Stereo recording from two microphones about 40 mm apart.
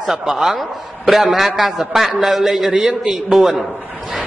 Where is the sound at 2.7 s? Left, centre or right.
Right.